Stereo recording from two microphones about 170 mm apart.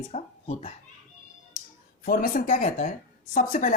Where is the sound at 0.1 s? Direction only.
35° left (ahead or behind).